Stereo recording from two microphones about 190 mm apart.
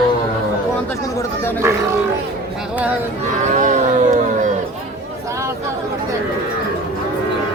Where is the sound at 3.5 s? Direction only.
40° right (ahead or behind).